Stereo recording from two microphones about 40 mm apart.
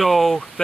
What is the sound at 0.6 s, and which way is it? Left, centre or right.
Speech, centre.